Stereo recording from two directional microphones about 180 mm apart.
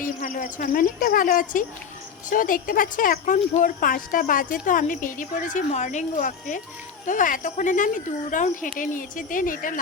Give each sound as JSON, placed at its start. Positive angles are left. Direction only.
{"t": 0.0, "sound": "speech", "side_deg": 45}